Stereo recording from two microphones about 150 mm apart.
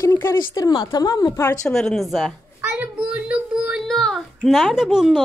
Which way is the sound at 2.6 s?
10° right (ahead or behind).